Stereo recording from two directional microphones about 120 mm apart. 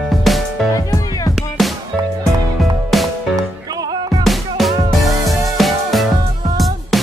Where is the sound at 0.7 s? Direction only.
25° left (ahead or behind).